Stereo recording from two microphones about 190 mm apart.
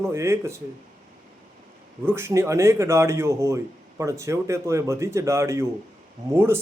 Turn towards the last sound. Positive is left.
turn(degrees=-10)  # may be behind; listen again after turning